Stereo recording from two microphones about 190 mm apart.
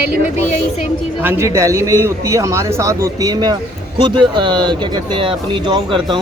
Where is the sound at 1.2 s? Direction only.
15° right (ahead or behind).